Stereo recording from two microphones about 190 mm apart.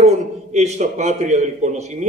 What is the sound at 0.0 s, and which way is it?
A man's voice, 35° right (ahead or behind).